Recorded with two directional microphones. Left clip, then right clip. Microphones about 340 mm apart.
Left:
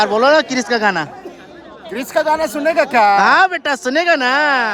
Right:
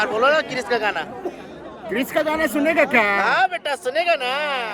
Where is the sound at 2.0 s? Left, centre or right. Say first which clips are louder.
Left 5 dB; centre.